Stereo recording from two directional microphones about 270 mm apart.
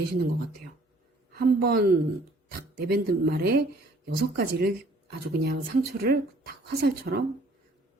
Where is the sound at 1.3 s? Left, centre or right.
Right.